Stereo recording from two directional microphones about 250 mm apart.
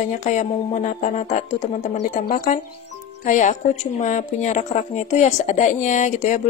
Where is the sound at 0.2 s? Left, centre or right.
Left.